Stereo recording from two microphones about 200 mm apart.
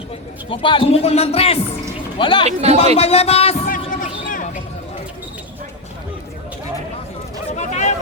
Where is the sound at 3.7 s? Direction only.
40° left (ahead or behind).